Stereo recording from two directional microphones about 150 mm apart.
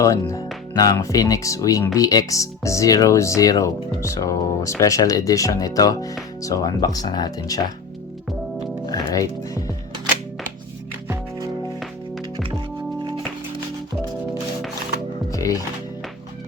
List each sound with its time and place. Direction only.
0.0 s speech: 20° left (ahead or behind)
8.9 s speech: 20° left (ahead or behind)
15.3 s music: 20° left (ahead or behind)